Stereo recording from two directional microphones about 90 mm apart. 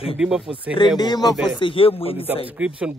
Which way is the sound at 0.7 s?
55° left (ahead or behind).